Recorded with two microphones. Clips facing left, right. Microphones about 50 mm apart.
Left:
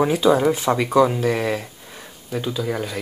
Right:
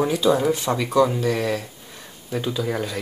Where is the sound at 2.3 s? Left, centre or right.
Centre.